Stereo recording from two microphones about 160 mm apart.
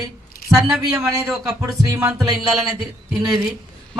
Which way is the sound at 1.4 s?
20° right (ahead or behind).